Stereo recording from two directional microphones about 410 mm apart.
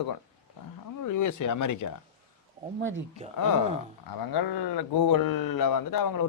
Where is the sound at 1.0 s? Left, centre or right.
Left.